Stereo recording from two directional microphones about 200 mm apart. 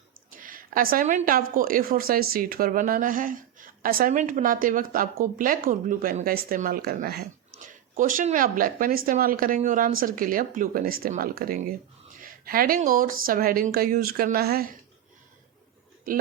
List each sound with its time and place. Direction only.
0.3 s a sound: 45° right (ahead or behind)
1.5 s speech: 45° right (ahead or behind)
7.6 s a woman's voice: 40° right (ahead or behind)